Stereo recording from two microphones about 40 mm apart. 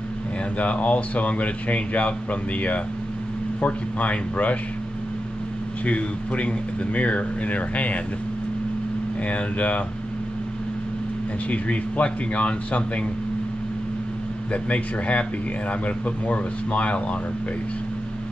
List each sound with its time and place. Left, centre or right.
0.6 s a man's voice: left
5.9 s a man's voice: left
9.3 s a man's voice: left
11.5 s a man's voice: left
14.5 s a man's voice: left